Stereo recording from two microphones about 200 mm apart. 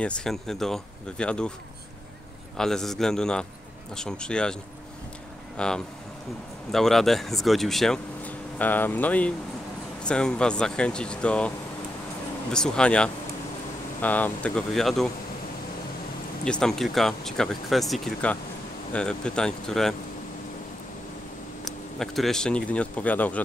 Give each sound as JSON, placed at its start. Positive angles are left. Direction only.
{"t": 0.0, "sound": "speech", "side_deg": 5}
{"t": 2.5, "sound": "speech", "side_deg": 0}
{"t": 5.6, "sound": "speech", "side_deg": 5}
{"t": 16.4, "sound": "speech", "side_deg": 5}
{"t": 21.6, "sound": "speech", "side_deg": 0}